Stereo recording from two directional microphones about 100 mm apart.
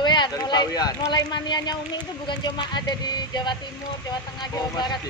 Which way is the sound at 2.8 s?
45° left (ahead or behind).